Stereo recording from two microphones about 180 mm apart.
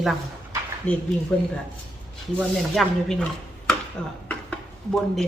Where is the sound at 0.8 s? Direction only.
5° left (ahead or behind).